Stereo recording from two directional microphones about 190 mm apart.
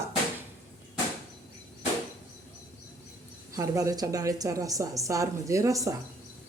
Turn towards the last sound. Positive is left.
turn(degrees=-15)  # may be behind; listen again after turning